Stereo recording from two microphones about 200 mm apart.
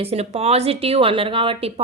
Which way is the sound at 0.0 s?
30° right (ahead or behind).